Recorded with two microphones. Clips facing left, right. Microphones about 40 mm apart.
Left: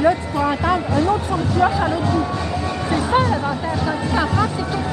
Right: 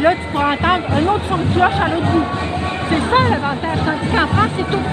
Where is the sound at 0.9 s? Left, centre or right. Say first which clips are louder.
Right 2 dB; right.